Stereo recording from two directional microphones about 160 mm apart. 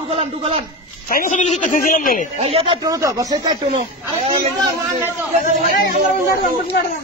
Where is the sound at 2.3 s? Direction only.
40° right (ahead or behind).